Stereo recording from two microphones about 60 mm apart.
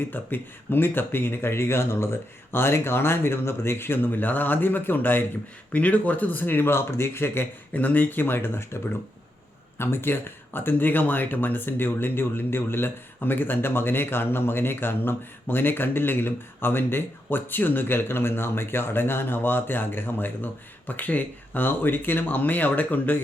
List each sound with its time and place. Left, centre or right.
0.0 s speech: left
7.7 s speech: left